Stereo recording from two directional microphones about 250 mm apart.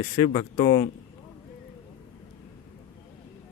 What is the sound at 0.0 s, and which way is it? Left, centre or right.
Speech, centre.